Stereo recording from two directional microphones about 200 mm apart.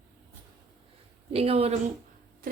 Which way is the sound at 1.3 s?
30° right (ahead or behind).